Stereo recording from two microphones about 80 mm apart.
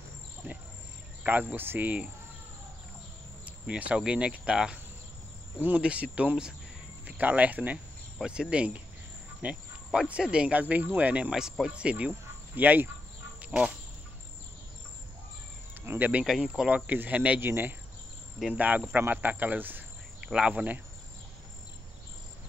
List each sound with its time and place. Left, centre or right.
1.5 s speech: right
3.4 s speech: centre
13.4 s a sound: centre
15.8 s cricket: right
16.3 s speech: centre
16.6 s speech: centre